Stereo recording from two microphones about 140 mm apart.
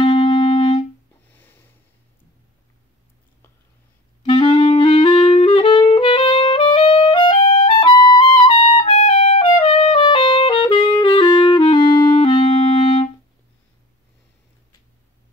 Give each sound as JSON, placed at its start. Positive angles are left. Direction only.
{"t": 0.0, "sound": "music", "side_deg": 35}
{"t": 1.3, "sound": "a sound", "side_deg": 15}
{"t": 4.2, "sound": "music", "side_deg": 35}
{"t": 8.8, "sound": "music", "side_deg": 55}
{"t": 9.6, "sound": "music", "side_deg": 40}